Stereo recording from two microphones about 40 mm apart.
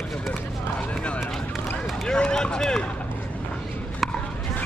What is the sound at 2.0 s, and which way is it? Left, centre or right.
Speech, centre.